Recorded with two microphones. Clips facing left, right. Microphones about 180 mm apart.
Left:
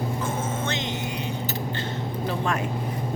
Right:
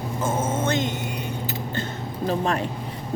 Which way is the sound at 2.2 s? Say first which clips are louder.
Right 4 dB; 35° right (ahead or behind).